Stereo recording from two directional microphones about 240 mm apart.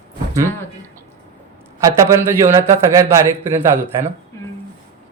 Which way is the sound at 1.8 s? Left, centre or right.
Centre.